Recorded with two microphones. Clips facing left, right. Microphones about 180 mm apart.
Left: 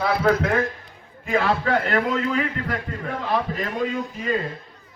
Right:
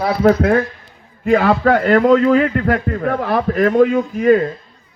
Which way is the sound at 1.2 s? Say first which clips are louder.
Right 8 dB; 55° right (ahead or behind).